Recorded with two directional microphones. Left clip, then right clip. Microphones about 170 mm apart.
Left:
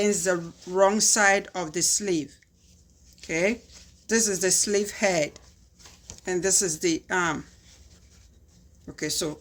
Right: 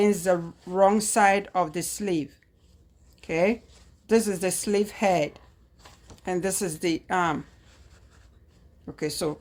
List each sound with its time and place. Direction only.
0.0 s a woman's voice: 35° right (ahead or behind)
9.0 s speech: 35° right (ahead or behind)